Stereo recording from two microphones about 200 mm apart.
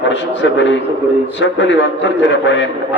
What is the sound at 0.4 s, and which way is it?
A man's voice, 65° left (ahead or behind).